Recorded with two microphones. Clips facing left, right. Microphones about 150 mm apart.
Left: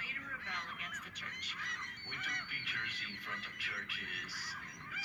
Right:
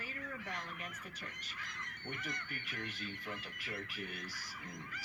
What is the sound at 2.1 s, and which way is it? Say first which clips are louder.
Speech: right 6 dB; 45° right (ahead or behind).